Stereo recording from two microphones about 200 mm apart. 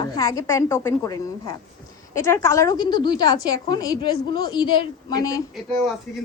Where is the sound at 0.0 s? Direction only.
15° left (ahead or behind).